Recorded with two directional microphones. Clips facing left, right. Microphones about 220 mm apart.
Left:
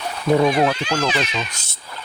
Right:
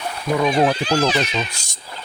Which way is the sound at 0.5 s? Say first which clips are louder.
Right 2 dB; 30° right (ahead or behind).